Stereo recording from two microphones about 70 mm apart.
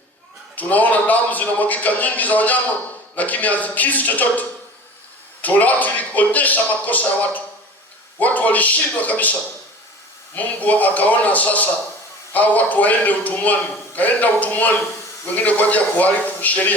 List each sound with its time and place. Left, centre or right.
0.5 s a man's voice: left
10.3 s a man's voice: left